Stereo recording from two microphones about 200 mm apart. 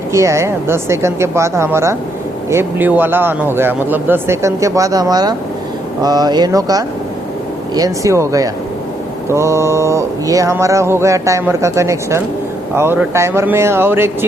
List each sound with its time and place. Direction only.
0.1 s mantra: 15° right (ahead or behind)
6.0 s speech: 20° right (ahead or behind)
7.8 s mantra: 15° right (ahead or behind)